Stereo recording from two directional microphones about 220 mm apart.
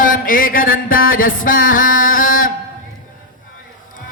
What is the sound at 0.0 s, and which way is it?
Music, 40° left (ahead or behind).